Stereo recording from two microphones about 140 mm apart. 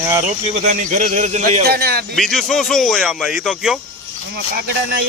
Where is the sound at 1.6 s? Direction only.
90° right.